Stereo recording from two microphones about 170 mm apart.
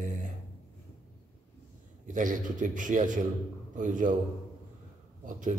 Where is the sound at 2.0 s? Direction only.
50° right (ahead or behind).